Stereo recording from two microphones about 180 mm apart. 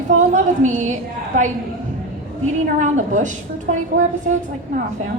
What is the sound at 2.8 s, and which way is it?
Speech, 45° right (ahead or behind).